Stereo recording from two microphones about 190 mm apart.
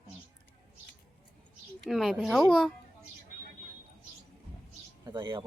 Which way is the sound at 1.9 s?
Centre (ahead or behind).